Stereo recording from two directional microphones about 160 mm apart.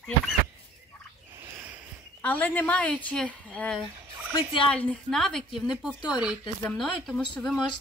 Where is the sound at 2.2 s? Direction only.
10° left (ahead or behind); by 6.3 s 5° right (ahead or behind).